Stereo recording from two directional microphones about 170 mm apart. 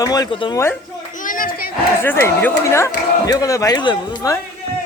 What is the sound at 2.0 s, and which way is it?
Speech, 15° left (ahead or behind).